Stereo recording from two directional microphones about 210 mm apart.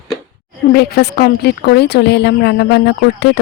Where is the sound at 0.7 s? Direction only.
45° left (ahead or behind).